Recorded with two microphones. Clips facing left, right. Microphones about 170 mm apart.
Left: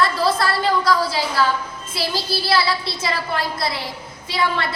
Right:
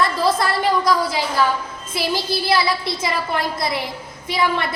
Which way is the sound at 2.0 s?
20° right (ahead or behind).